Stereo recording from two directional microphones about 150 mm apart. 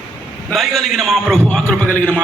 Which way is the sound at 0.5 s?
Centre (ahead or behind).